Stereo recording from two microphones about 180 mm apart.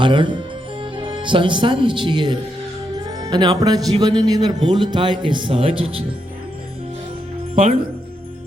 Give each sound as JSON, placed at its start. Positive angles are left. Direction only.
{"t": 0.0, "sound": "speech", "side_deg": -25}